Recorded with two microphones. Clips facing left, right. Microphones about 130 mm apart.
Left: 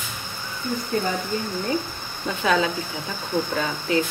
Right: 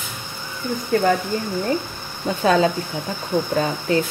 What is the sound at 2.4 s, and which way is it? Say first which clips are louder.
Speech: right 5 dB; 40° right (ahead or behind).